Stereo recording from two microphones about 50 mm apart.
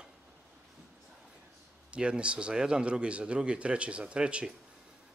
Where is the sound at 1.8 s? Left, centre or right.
Right.